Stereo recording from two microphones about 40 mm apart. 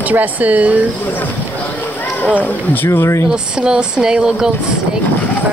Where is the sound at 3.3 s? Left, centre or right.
Right.